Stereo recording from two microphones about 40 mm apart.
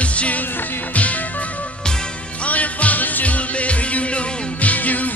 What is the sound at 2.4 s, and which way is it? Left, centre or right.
Music, left.